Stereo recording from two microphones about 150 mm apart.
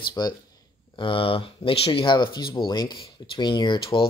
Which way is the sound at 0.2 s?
30° left (ahead or behind).